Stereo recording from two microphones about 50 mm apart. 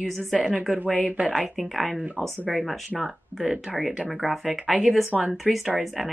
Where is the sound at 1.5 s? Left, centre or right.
Centre.